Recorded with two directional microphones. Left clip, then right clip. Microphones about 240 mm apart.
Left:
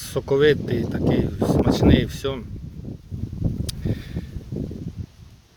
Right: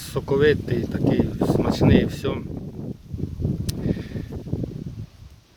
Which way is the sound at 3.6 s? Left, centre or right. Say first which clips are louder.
Right 3 dB; centre.